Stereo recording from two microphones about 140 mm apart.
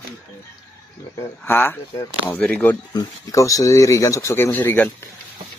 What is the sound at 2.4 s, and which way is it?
Speech, 10° left (ahead or behind).